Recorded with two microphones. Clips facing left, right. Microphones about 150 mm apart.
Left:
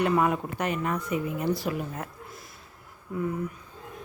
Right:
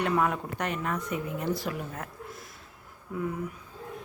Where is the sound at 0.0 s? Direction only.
5° left (ahead or behind).